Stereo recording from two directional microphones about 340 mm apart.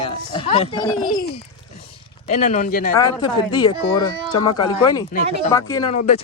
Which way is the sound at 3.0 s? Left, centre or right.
Centre.